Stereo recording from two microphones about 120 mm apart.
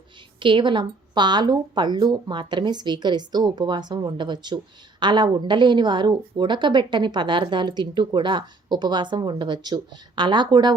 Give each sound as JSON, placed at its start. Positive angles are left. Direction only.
{"t": 0.3, "sound": "a woman's voice", "side_deg": -45}